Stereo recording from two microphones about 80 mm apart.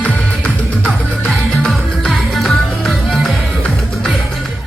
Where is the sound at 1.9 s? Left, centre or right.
Centre.